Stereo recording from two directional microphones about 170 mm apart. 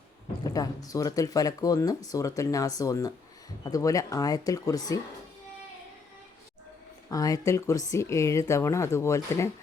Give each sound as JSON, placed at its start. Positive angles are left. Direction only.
{"t": 0.4, "sound": "speech", "side_deg": 20}
{"t": 7.1, "sound": "speech", "side_deg": 20}